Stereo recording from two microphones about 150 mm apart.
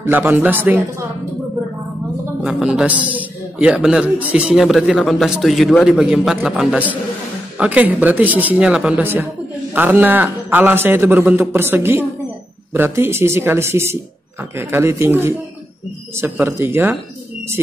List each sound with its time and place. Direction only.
0.0 s a man's voice: 15° right (ahead or behind)
2.4 s a man's voice: 5° right (ahead or behind)